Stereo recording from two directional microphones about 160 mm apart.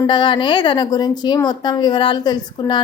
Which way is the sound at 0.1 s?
30° left (ahead or behind).